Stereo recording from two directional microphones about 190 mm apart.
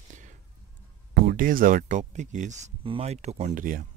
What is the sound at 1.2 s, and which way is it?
Speech, 45° right (ahead or behind).